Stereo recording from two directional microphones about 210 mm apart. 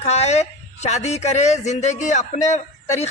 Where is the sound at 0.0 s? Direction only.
30° left (ahead or behind).